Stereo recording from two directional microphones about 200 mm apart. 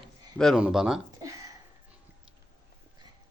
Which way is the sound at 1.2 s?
15° right (ahead or behind).